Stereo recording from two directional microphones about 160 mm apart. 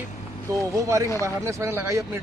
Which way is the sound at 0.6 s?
20° right (ahead or behind).